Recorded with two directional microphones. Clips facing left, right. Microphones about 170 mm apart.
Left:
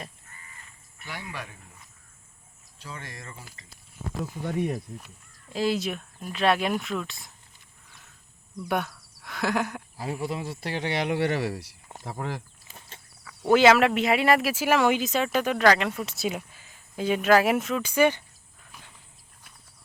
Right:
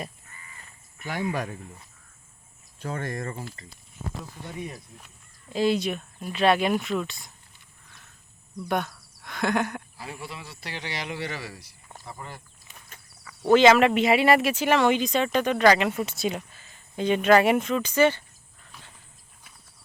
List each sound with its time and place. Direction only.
0.9 s speech: 45° right (ahead or behind)
2.7 s speech: 50° right (ahead or behind)
4.4 s speech: 55° left (ahead or behind)
5.5 s speech: centre (ahead or behind)
8.6 s speech: 5° left (ahead or behind)
9.2 s a sound: 5° left (ahead or behind)
10.0 s speech: 45° left (ahead or behind); by 11.8 s 70° left (ahead or behind)
12.0 s speech: 90° left
12.6 s insect: 30° left (ahead or behind)
13.5 s speech: 5° left (ahead or behind)